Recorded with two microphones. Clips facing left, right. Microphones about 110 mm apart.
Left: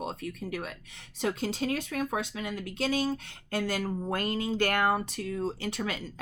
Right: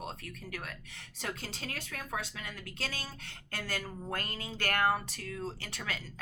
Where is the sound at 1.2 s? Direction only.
15° left (ahead or behind).